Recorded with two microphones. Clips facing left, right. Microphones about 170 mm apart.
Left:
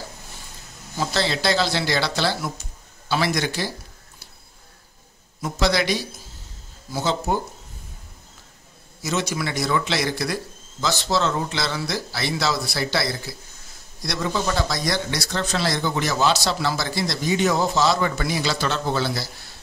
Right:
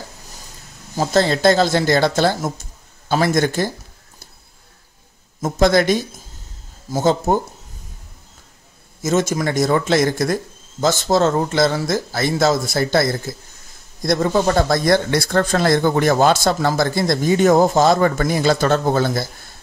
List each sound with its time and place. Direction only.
0.9 s speech: 45° right (ahead or behind)
5.4 s speech: 50° right (ahead or behind)
9.0 s speech: 45° right (ahead or behind)